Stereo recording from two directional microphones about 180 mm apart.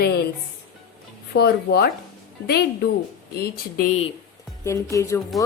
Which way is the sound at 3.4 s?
60° left (ahead or behind).